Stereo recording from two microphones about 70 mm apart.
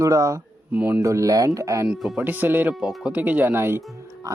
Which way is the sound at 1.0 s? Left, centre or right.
Right.